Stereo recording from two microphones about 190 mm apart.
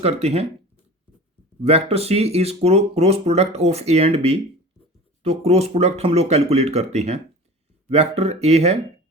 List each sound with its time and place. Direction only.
0.0 s speech: 35° right (ahead or behind)
1.6 s speech: 30° right (ahead or behind)